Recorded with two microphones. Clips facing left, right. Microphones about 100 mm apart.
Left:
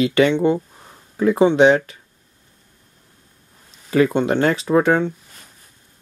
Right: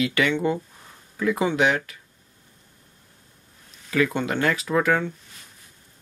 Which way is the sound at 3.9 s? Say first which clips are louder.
Left 7 dB; 30° left (ahead or behind).